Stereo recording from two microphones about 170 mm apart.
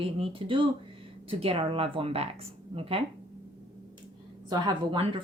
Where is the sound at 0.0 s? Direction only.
30° right (ahead or behind).